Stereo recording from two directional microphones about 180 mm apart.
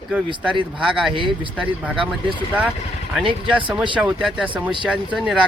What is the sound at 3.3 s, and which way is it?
Speech, 30° right (ahead or behind).